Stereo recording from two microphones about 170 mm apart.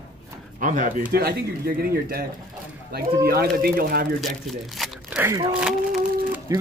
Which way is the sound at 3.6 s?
60° right (ahead or behind).